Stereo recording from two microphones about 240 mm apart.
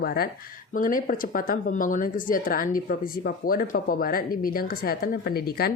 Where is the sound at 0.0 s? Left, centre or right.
Left.